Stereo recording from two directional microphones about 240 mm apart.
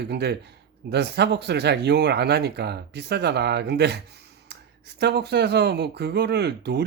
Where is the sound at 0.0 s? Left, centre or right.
Right.